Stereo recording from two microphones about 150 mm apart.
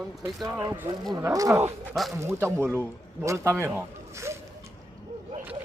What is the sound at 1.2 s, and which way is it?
Speech, 20° right (ahead or behind).